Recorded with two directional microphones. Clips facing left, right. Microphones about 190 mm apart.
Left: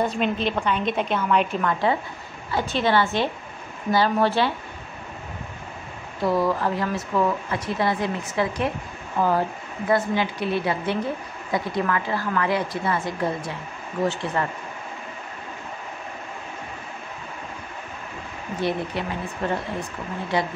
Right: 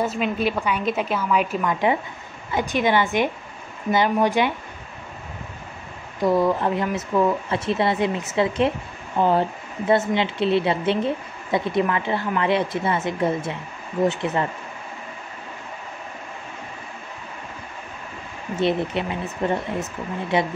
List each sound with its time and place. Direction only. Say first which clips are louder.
0.0 s a woman's voice: right 1 dB; 5° right (ahead or behind)
6.2 s speech: right 3 dB; 20° right (ahead or behind)
18.6 s speech: right 4 dB; 20° right (ahead or behind)